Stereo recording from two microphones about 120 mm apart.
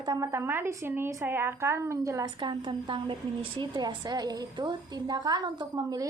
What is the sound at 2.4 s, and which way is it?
Speech, 40° right (ahead or behind).